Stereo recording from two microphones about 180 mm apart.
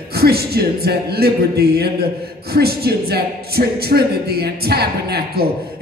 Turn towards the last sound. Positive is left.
turn(degrees=-60)  # may be behind; listen again after turning